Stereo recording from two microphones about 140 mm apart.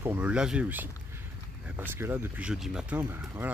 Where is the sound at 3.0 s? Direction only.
15° right (ahead or behind).